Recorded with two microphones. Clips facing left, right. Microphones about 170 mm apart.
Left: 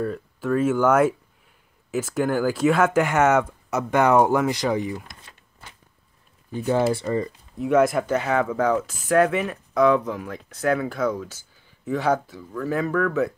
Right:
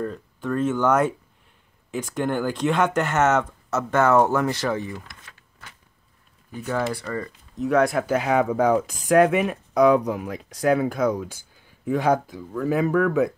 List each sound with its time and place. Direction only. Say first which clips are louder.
0.0 s speech: left 2 dB; 5° left (ahead or behind)
6.5 s speech: left 5 dB; 30° left (ahead or behind)
7.5 s speech: left 1 dB; 5° left (ahead or behind)
8.1 s speech: right 2 dB; 15° right (ahead or behind)